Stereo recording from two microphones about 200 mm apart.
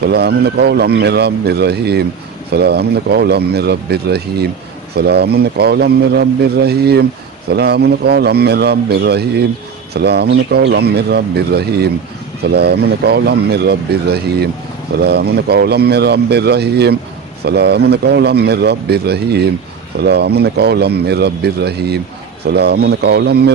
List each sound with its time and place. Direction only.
0.0 s speech: 55° right (ahead or behind)